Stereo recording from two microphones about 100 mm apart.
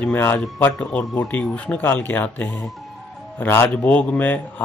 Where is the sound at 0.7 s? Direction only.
10° left (ahead or behind).